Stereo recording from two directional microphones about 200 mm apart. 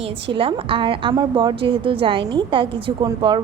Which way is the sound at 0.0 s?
25° right (ahead or behind).